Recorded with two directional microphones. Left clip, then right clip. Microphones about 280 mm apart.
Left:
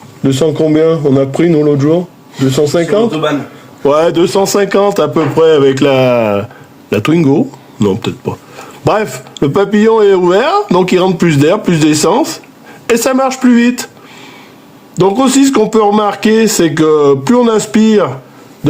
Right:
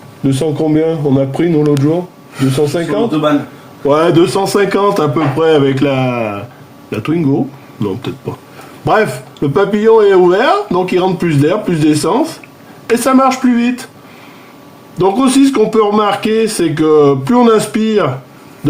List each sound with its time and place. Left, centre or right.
0.2 s speech: left
14.9 s speech: left